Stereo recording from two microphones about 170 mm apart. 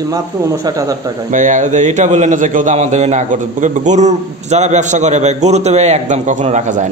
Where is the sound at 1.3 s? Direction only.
45° right (ahead or behind).